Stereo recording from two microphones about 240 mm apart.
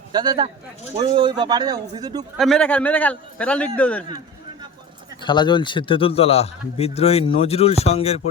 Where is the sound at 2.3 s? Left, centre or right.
Centre.